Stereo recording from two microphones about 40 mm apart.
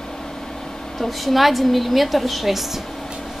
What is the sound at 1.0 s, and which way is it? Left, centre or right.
A woman's voice, centre.